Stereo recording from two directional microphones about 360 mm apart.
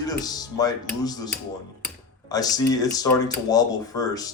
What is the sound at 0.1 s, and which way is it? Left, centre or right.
Speech, centre.